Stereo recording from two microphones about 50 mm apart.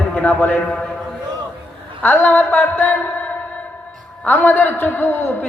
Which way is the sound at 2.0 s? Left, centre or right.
Left.